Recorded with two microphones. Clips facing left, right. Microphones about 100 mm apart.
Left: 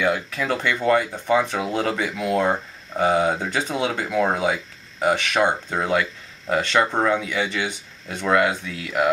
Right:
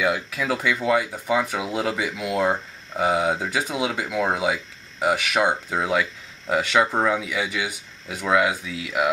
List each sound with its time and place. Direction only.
0.0 s speech: 5° right (ahead or behind)